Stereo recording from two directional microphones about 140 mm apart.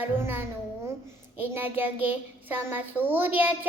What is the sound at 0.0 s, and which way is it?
A child's voice, 15° right (ahead or behind).